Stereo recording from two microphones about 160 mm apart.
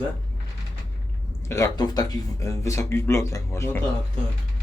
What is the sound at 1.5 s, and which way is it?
Speech, 20° left (ahead or behind).